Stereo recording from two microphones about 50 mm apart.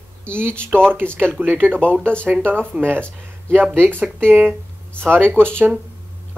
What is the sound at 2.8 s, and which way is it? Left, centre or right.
Speech, right.